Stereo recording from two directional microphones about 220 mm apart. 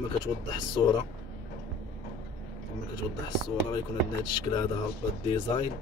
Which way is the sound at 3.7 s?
20° left (ahead or behind).